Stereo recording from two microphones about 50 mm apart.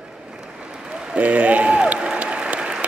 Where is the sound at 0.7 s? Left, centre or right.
Centre.